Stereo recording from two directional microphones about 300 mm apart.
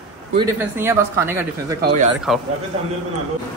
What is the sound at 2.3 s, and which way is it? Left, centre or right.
Speech, centre.